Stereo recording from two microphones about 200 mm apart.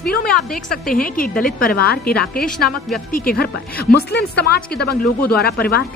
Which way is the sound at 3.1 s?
45° left (ahead or behind).